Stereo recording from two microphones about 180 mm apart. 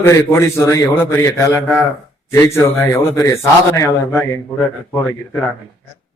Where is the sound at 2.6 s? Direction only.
15° left (ahead or behind).